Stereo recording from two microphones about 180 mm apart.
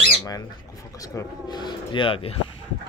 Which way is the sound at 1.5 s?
25° left (ahead or behind).